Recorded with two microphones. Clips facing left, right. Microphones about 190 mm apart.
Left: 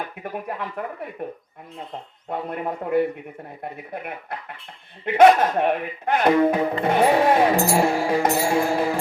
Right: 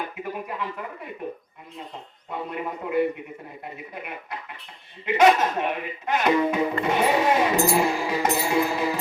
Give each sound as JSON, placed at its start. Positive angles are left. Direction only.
{"t": 0.2, "sound": "speech", "side_deg": 55}
{"t": 2.3, "sound": "music", "side_deg": 55}
{"t": 3.6, "sound": "speech", "side_deg": 55}
{"t": 7.8, "sound": "music", "side_deg": 55}